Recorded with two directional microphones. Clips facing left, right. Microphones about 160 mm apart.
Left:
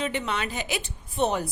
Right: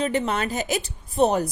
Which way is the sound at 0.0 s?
40° right (ahead or behind).